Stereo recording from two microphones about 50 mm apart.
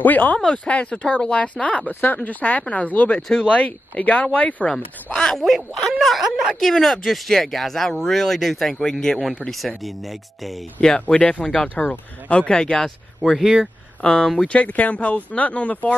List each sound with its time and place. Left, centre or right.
0.0 s speech: left
3.2 s speech: centre
3.4 s speech: left
4.6 s speech: centre
5.9 s speech: centre
10.8 s speech: centre
11.7 s speech: left; by 12.9 s centre
13.2 s speech: centre
14.0 s speech: centre
14.5 s speech: left